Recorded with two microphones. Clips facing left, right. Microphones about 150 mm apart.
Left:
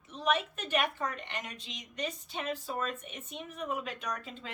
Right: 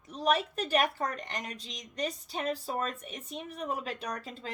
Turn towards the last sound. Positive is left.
turn(degrees=-35)  # may be behind; listen again after turning